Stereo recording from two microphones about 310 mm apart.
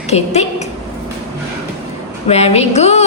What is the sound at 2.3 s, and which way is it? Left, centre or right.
Speech, centre.